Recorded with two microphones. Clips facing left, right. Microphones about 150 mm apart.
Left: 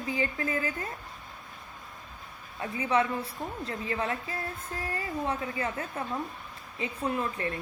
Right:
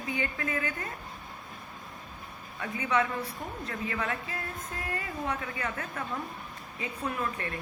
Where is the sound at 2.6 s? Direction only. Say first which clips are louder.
Left 2 dB; 30° left (ahead or behind).